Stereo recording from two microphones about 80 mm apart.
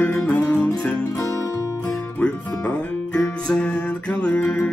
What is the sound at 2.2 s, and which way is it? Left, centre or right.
Music, centre.